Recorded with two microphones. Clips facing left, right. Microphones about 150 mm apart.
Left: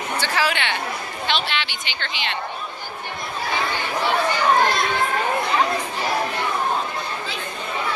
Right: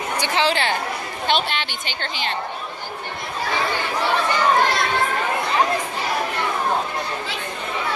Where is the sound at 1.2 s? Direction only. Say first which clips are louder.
Right 3 dB; 45° right (ahead or behind).